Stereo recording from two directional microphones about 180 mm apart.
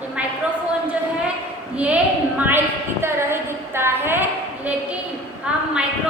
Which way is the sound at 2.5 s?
10° right (ahead or behind).